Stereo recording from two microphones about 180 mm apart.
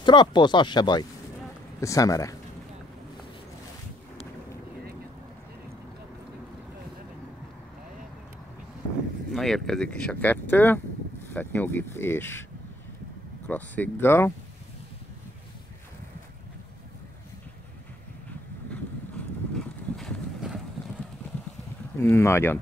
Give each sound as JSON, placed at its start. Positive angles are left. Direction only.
{"t": 0.0, "sound": "speech", "side_deg": 25}
{"t": 9.3, "sound": "speech", "side_deg": 0}
{"t": 13.5, "sound": "speech", "side_deg": 10}
{"t": 19.5, "sound": "boat", "side_deg": 0}
{"t": 21.9, "sound": "speech", "side_deg": 15}